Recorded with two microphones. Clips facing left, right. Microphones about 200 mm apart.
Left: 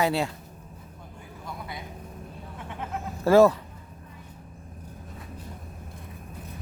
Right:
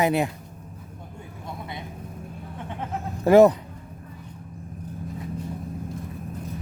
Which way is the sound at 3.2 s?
20° right (ahead or behind).